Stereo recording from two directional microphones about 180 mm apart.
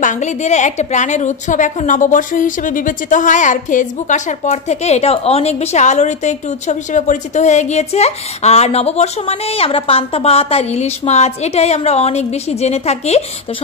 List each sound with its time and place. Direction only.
0.0 s a woman's voice: 40° left (ahead or behind)